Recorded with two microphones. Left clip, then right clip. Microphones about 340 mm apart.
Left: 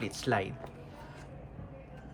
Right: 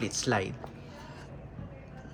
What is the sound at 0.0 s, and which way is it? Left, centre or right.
Speech, centre.